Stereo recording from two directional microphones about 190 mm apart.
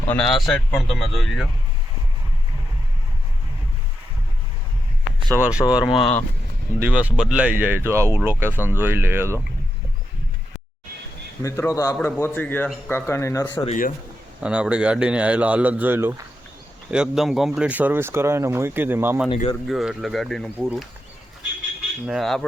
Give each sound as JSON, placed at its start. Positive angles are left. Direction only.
{"t": 0.1, "sound": "speech", "side_deg": 5}
{"t": 5.3, "sound": "speech", "side_deg": -5}
{"t": 5.8, "sound": "speech", "side_deg": 30}
{"t": 6.7, "sound": "speech", "side_deg": -10}
{"t": 11.4, "sound": "speech", "side_deg": 15}
{"t": 13.7, "sound": "speech", "side_deg": 45}
{"t": 14.4, "sound": "speech", "side_deg": -5}
{"t": 19.3, "sound": "speech", "side_deg": 30}
{"t": 19.6, "sound": "speech", "side_deg": 0}
{"t": 22.0, "sound": "speech", "side_deg": 0}